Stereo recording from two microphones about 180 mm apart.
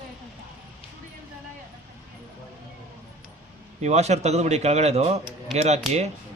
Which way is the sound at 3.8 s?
40° right (ahead or behind).